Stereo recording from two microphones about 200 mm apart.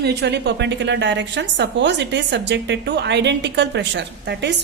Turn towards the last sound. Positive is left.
turn(degrees=-60)  # may be behind; listen again after turning